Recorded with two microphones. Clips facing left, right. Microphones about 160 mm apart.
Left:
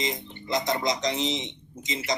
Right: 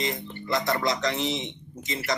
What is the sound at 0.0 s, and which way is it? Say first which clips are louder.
A man's voice: right 1 dB; 20° left (ahead or behind).